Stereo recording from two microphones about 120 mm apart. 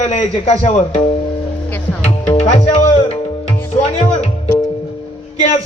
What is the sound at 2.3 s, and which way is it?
Music, 55° left (ahead or behind).